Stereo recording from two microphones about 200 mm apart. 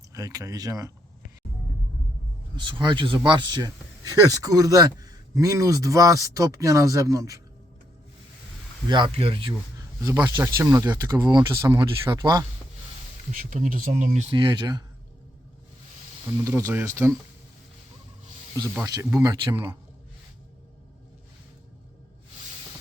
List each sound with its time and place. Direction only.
0.1 s speech: 15° right (ahead or behind)
2.6 s speech: 25° right (ahead or behind)
8.9 s speech: 25° right (ahead or behind)
13.5 s speech: 35° right (ahead or behind); by 14.8 s 20° right (ahead or behind)
16.2 s speech: 10° right (ahead or behind)
18.8 s speech: 15° right (ahead or behind)